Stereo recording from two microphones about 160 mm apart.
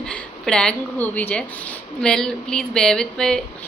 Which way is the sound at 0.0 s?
5° left (ahead or behind).